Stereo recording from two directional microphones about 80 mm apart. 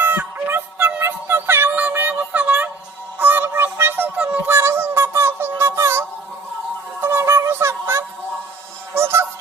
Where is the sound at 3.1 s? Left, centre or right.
Right.